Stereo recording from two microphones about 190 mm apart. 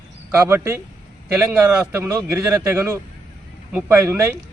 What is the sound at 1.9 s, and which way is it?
A man's voice, 15° right (ahead or behind).